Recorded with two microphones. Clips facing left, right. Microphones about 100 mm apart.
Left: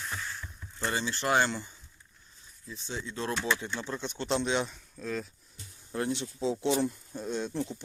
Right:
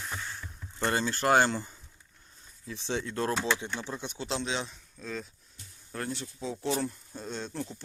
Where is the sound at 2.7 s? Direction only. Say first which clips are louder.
Right 5 dB; 90° right; by 3.2 s 65° right (ahead or behind).